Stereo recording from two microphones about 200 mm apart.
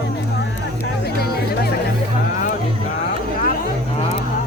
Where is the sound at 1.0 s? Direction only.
50° left (ahead or behind).